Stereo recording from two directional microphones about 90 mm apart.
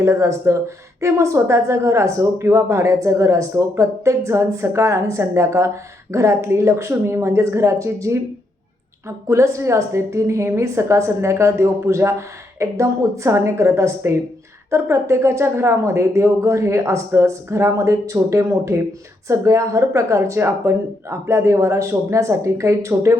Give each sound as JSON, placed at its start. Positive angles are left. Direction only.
{"t": 0.0, "sound": "speech", "side_deg": -30}